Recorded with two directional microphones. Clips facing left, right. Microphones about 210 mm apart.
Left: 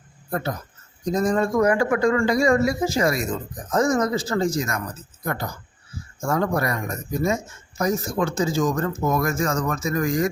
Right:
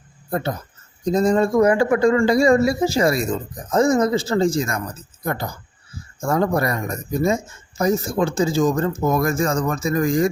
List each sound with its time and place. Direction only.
0.3 s speech: 25° right (ahead or behind)